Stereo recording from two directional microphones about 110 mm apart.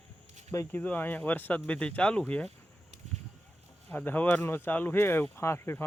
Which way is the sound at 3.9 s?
15° left (ahead or behind).